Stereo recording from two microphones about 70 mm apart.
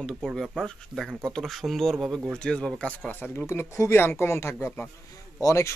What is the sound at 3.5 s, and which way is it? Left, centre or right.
Speech, left.